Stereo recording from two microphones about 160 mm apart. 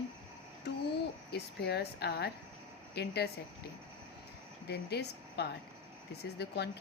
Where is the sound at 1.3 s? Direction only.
90° left.